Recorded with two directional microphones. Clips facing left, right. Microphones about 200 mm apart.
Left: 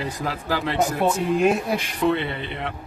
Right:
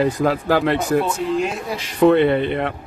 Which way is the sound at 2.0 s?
55° right (ahead or behind).